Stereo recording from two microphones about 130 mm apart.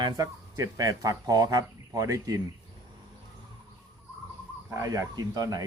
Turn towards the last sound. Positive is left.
turn(degrees=-30)  # may be behind; listen again after turning